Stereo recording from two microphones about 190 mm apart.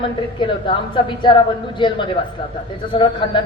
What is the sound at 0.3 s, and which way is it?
A woman's voice, 25° left (ahead or behind).